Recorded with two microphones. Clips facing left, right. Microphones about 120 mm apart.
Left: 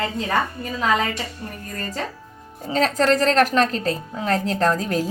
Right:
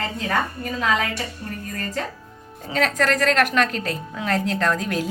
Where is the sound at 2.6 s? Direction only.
30° left (ahead or behind).